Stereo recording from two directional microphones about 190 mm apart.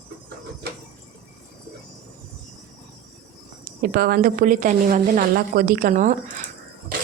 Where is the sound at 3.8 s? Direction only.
55° right (ahead or behind).